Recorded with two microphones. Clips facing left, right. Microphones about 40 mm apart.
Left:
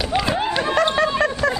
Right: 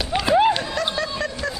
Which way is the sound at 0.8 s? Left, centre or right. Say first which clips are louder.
Left 7 dB; left.